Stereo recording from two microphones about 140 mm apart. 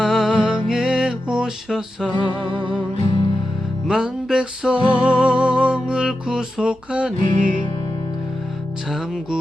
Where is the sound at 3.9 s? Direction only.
5° right (ahead or behind).